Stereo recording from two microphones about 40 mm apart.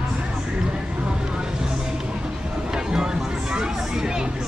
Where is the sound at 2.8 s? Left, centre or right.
Centre.